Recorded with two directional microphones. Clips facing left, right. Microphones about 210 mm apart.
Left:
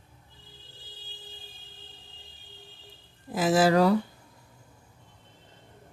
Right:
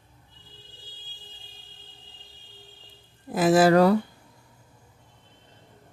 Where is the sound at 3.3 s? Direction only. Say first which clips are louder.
Right 4 dB; 55° right (ahead or behind).